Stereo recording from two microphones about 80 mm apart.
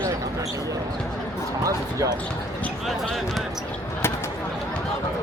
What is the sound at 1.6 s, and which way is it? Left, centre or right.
Speech, right.